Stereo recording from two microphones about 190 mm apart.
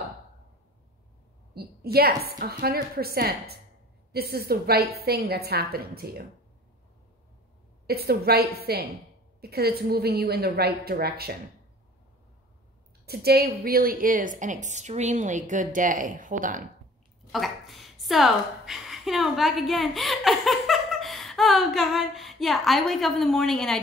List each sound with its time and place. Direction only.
1.5 s a woman's voice: 55° right (ahead or behind)
7.8 s a woman's voice: 55° right (ahead or behind)
13.0 s a woman's voice: 55° right (ahead or behind)
17.3 s a woman's voice: centre (ahead or behind)